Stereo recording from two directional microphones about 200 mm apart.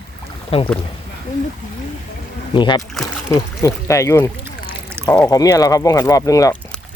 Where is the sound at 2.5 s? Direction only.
25° left (ahead or behind).